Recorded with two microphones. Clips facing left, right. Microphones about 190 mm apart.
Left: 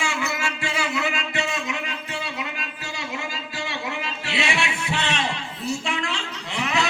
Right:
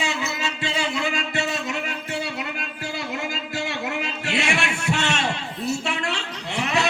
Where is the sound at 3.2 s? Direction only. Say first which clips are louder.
Right 4 dB; 55° right (ahead or behind).